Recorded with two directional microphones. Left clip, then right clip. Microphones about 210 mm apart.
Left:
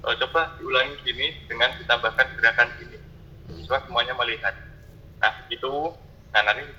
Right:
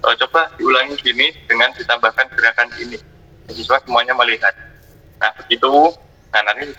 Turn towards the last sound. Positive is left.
turn(degrees=-45)  # may be behind; listen again after turning